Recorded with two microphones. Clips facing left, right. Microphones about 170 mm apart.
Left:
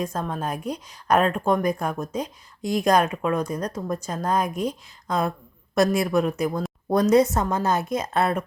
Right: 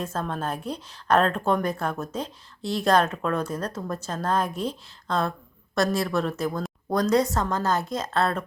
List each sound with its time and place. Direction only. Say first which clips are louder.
0.0 s a woman's voice: left 2 dB; 10° left (ahead or behind)